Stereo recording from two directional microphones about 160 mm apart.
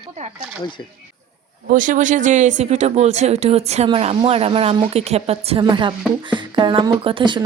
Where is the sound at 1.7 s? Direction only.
55° right (ahead or behind).